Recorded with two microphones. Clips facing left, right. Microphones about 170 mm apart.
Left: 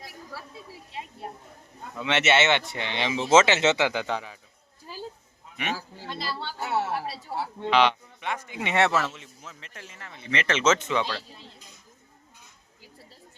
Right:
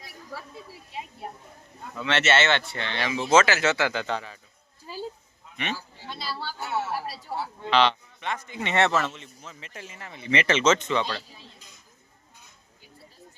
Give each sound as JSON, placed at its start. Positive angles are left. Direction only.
{"t": 2.0, "sound": "speech", "side_deg": 15}
{"t": 6.1, "sound": "speech", "side_deg": 0}
{"t": 6.7, "sound": "speech", "side_deg": 30}
{"t": 7.7, "sound": "speech", "side_deg": 10}
{"t": 10.5, "sound": "speech", "side_deg": 5}